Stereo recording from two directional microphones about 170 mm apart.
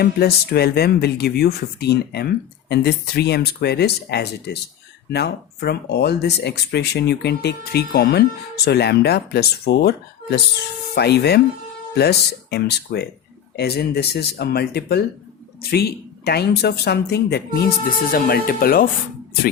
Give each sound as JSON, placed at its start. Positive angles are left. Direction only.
{"t": 0.0, "sound": "speech", "side_deg": 70}
{"t": 18.1, "sound": "speech", "side_deg": 60}